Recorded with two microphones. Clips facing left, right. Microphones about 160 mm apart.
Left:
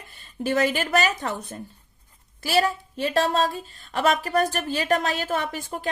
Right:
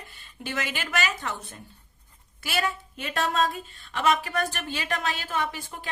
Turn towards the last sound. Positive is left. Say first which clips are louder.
# left 3 dB
turn(degrees=45)  # may be behind; listen again after turning